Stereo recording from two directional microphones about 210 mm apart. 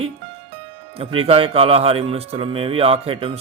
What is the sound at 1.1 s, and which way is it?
Speech, 25° right (ahead or behind).